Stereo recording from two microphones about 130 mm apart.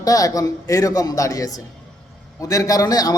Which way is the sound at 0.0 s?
25° left (ahead or behind).